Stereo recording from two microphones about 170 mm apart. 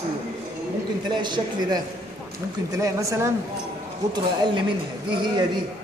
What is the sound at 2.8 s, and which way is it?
A man's voice, 20° right (ahead or behind).